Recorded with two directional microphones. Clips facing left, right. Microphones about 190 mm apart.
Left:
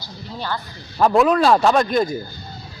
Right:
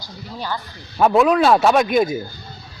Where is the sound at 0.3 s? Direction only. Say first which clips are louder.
Even; 5° right (ahead or behind).